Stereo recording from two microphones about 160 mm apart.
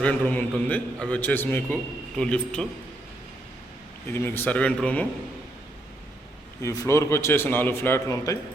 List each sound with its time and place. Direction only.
0.0 s a man's voice: 10° left (ahead or behind)
4.1 s a man's voice: 15° left (ahead or behind)
6.6 s a man's voice: 20° left (ahead or behind)